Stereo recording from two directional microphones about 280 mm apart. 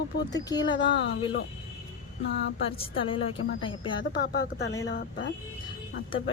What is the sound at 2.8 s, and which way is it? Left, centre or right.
A woman's voice, centre.